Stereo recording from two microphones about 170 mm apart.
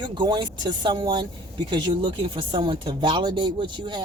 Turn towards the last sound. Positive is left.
turn(degrees=-25)  # may be behind; listen again after turning